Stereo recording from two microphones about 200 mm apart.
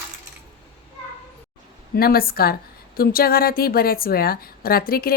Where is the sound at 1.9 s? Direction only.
50° left (ahead or behind).